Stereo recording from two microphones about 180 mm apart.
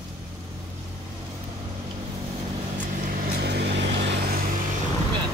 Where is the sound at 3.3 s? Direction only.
65° right (ahead or behind).